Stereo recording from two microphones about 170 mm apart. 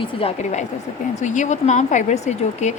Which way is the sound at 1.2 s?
45° left (ahead or behind).